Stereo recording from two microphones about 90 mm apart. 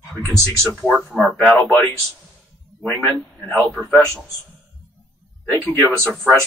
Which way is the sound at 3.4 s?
15° left (ahead or behind).